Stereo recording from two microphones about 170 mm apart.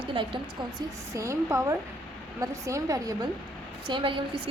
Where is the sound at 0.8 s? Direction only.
20° right (ahead or behind).